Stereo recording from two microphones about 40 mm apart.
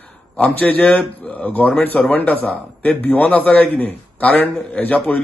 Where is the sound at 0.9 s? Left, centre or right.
Left.